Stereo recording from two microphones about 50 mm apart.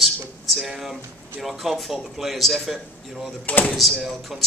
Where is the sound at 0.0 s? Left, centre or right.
Centre.